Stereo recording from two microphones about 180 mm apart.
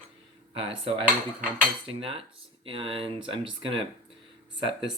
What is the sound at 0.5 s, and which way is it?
Speech, 30° right (ahead or behind).